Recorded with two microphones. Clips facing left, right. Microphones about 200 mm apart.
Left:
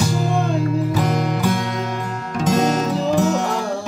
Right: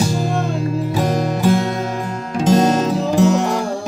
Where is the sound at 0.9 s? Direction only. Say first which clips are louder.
Right 2 dB; 25° right (ahead or behind).